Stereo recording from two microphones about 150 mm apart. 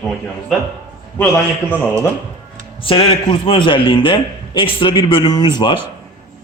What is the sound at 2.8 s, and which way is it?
A man's voice, 35° left (ahead or behind).